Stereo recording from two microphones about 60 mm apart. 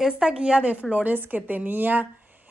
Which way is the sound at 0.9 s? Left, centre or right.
Right.